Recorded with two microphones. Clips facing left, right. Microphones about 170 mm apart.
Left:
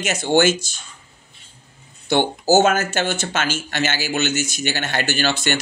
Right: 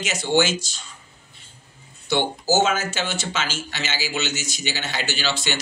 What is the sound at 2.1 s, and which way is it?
Speech, 50° left (ahead or behind).